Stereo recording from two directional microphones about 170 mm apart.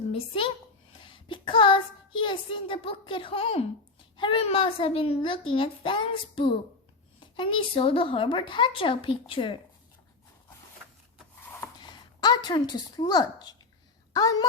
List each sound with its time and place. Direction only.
0.1 s speech: 30° left (ahead or behind)
0.9 s child singing: 30° left (ahead or behind)
4.2 s a child's voice: 30° left (ahead or behind)
11.8 s a woman's voice: 25° left (ahead or behind)